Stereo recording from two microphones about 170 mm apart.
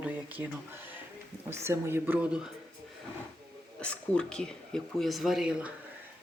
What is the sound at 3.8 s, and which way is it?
Speech, 5° left (ahead or behind).